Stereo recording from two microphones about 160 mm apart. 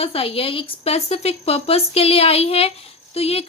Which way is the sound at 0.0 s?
35° left (ahead or behind).